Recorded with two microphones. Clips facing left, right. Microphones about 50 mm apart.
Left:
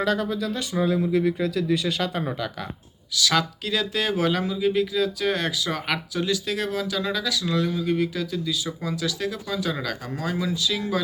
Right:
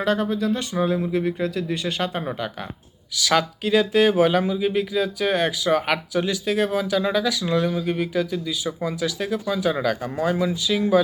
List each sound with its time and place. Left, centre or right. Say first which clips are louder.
0.0 s speech: right 2 dB; right
3.2 s speech: right 2 dB; centre